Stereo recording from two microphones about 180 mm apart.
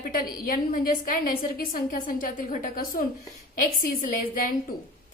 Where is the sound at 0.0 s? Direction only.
55° left (ahead or behind).